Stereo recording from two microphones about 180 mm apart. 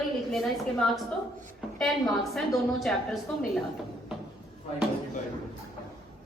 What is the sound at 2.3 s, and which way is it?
A woman's voice, centre (ahead or behind).